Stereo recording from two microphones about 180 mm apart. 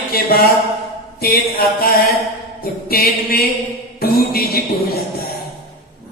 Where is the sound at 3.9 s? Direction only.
55° left (ahead or behind).